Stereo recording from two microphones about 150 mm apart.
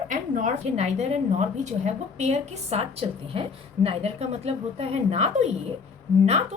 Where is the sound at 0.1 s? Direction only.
55° right (ahead or behind).